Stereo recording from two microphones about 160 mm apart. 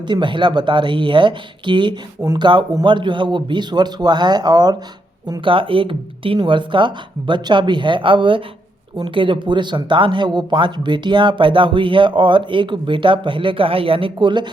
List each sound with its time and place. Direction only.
0.1 s a man's voice: 30° right (ahead or behind)